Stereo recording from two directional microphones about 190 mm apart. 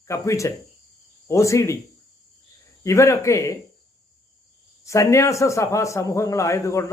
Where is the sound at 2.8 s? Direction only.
15° left (ahead or behind).